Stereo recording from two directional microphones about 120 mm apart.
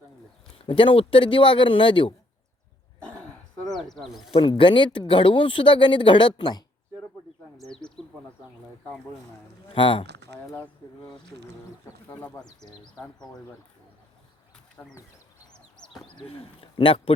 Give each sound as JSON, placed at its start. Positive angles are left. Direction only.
{"t": 0.6, "sound": "speech", "side_deg": 45}
{"t": 3.7, "sound": "speech", "side_deg": 5}
{"t": 4.3, "sound": "speech", "side_deg": 45}
{"t": 7.6, "sound": "bird", "side_deg": 5}
{"t": 9.7, "sound": "speech", "side_deg": 45}
{"t": 10.5, "sound": "speech", "side_deg": 15}
{"t": 12.3, "sound": "speech", "side_deg": 35}
{"t": 14.8, "sound": "speech", "side_deg": 15}
{"t": 15.5, "sound": "a sound", "side_deg": 0}
{"t": 16.1, "sound": "speech", "side_deg": 50}